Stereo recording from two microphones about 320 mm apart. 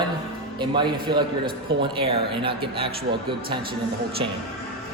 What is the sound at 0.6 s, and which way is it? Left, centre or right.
A man's voice, centre.